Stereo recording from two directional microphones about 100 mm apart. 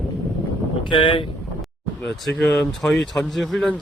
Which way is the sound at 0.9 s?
55° left (ahead or behind).